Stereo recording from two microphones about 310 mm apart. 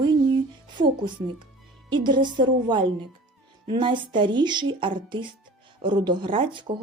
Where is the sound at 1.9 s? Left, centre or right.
Centre.